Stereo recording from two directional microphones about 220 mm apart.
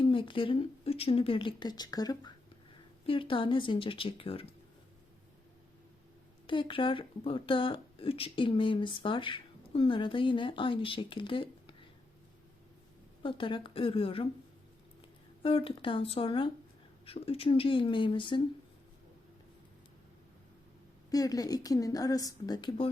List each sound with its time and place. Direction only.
0.0 s speech: 25° left (ahead or behind)
6.5 s speech: 20° left (ahead or behind)
13.2 s speech: 20° left (ahead or behind)
15.4 s speech: 25° left (ahead or behind)
21.1 s a woman's voice: 15° left (ahead or behind)